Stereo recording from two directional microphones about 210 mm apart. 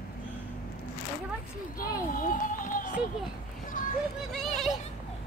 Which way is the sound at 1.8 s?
40° left (ahead or behind).